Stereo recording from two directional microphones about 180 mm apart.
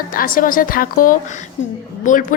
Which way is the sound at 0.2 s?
50° left (ahead or behind).